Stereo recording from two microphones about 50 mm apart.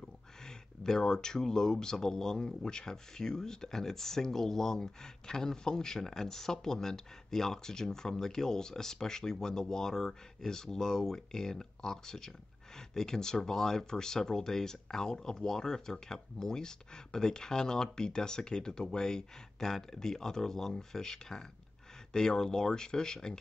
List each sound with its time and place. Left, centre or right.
0.4 s speech: centre